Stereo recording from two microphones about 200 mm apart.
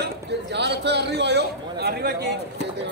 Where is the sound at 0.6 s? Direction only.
55° right (ahead or behind).